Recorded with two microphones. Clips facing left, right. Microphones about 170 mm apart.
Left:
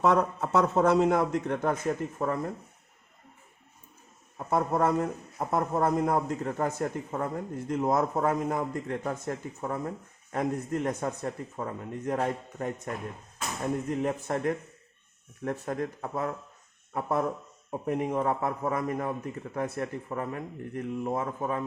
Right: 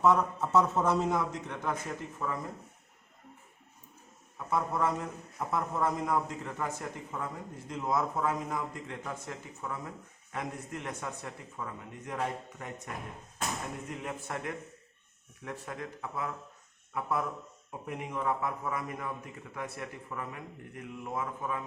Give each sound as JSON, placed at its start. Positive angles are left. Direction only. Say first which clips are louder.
{"t": 0.0, "sound": "a man's voice", "louder": "left 2 dB", "side_deg": 70}
{"t": 4.4, "sound": "speech", "louder": "left 5 dB", "side_deg": 45}
{"t": 13.9, "sound": "speech", "louder": "left 9 dB", "side_deg": 40}